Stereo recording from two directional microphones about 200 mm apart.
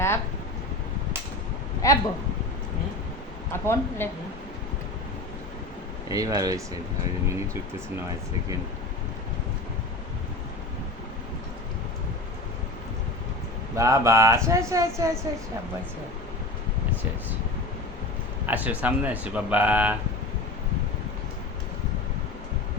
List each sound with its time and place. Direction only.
1.8 s speech: 15° left (ahead or behind)
3.5 s speech: 10° left (ahead or behind)
6.1 s speech: 15° right (ahead or behind)
13.7 s speech: 15° right (ahead or behind)
18.4 s speech: 5° right (ahead or behind)